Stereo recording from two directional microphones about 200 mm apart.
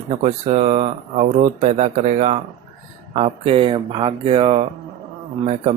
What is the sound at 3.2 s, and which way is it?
Speech, 30° right (ahead or behind).